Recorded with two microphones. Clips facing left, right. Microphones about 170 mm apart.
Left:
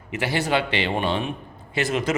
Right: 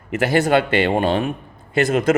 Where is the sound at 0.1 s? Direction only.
50° right (ahead or behind).